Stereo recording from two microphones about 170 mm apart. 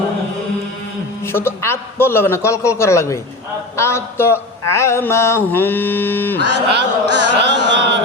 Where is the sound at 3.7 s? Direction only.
15° left (ahead or behind).